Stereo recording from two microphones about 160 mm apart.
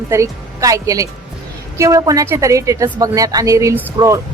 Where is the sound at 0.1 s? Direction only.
20° right (ahead or behind).